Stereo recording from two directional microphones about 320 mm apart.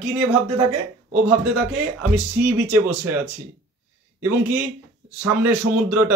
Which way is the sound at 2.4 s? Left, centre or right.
Centre.